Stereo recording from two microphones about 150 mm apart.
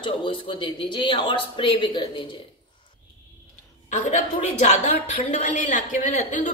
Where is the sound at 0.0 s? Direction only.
35° left (ahead or behind).